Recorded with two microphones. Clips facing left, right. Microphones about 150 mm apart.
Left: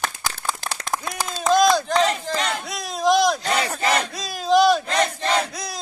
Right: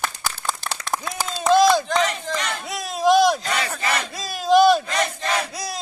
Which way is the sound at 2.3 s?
30° left (ahead or behind).